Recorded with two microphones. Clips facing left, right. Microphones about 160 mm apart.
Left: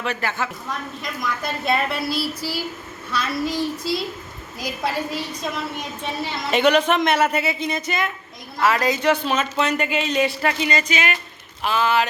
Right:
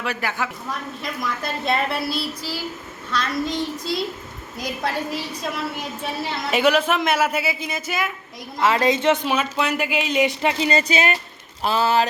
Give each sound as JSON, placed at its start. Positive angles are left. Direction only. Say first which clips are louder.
{"t": 0.0, "sound": "speech", "louder": "left 1 dB", "side_deg": -10}
{"t": 1.2, "sound": "a woman's voice", "louder": "left 1 dB", "side_deg": 0}
{"t": 8.5, "sound": "a woman's voice", "louder": "right 1 dB", "side_deg": -25}
{"t": 9.2, "sound": "speech", "louder": "even", "side_deg": -10}
{"t": 10.7, "sound": "speech", "louder": "right 3 dB", "side_deg": -35}